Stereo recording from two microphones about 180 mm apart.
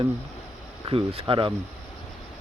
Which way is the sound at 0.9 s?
30° right (ahead or behind).